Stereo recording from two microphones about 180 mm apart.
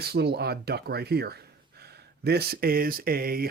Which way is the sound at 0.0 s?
60° right (ahead or behind).